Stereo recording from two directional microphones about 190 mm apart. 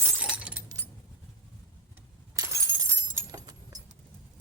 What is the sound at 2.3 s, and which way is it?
Breaking, 15° right (ahead or behind).